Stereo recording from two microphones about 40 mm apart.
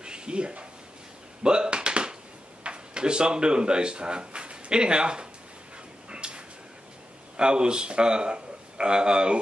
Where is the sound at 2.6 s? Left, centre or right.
Right.